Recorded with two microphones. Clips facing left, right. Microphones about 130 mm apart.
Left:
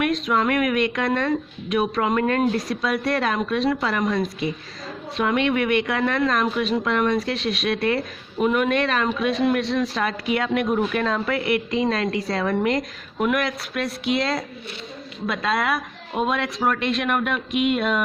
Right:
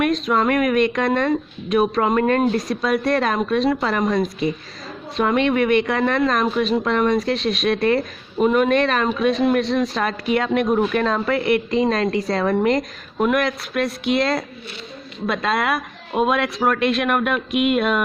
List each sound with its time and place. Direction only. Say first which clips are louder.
0.3 s a woman's voice: right 2 dB; 40° right (ahead or behind)
2.4 s speech: right 2 dB; 15° right (ahead or behind)
2.8 s a woman's voice: right 4 dB; 45° right (ahead or behind)
8.4 s a woman's voice: right 4 dB; 30° right (ahead or behind); by 18.0 s 60° right (ahead or behind)